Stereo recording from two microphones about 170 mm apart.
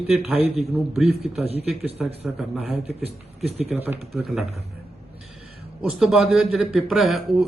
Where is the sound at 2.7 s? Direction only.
40° right (ahead or behind).